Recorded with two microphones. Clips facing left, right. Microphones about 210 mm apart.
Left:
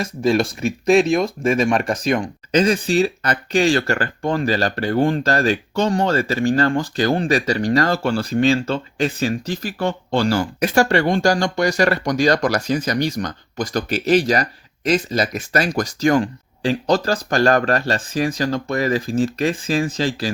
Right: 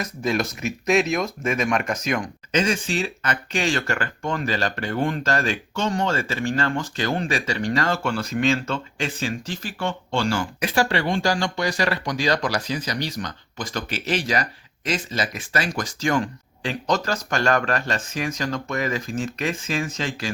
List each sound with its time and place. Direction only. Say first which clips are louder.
0.0 s speech: left 6 dB; 30° left (ahead or behind)